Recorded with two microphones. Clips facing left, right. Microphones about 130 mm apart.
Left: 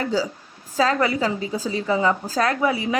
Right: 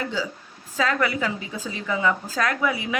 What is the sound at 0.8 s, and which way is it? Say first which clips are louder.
A woman's voice: left 4 dB; 30° left (ahead or behind).